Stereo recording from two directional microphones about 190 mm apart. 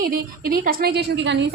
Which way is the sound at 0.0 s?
50° right (ahead or behind).